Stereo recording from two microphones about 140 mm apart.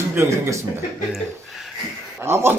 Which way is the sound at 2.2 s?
15° right (ahead or behind).